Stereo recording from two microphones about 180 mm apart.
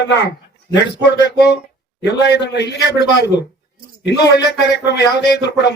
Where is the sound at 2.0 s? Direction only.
75° left (ahead or behind).